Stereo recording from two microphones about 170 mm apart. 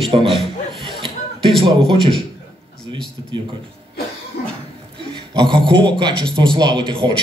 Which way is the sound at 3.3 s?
25° right (ahead or behind).